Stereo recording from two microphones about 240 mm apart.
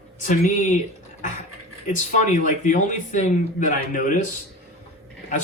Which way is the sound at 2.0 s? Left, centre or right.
Left.